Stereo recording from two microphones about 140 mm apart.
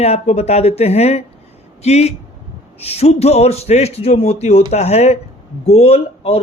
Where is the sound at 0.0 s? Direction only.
50° left (ahead or behind).